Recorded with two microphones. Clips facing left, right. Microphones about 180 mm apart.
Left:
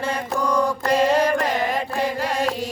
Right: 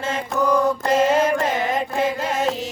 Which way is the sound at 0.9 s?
20° right (ahead or behind).